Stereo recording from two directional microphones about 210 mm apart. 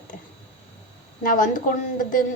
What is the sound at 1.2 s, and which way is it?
A woman's voice, 40° left (ahead or behind).